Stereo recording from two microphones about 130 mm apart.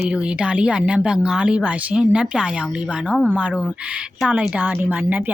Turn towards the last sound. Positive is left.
turn(degrees=-10)  # may be behind; listen again after turning